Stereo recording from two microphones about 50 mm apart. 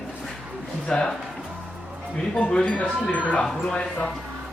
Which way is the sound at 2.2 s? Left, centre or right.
Centre.